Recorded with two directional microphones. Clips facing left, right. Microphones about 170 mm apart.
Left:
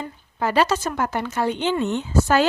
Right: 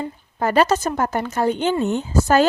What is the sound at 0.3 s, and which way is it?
A woman's voice, 45° right (ahead or behind).